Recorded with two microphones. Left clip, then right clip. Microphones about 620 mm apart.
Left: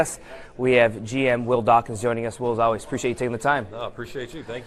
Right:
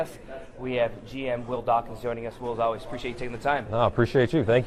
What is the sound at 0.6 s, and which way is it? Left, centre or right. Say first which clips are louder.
A man's voice: left 9 dB; left.